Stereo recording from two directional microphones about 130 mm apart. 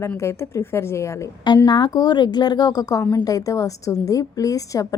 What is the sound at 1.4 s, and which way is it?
A woman's voice, 35° left (ahead or behind).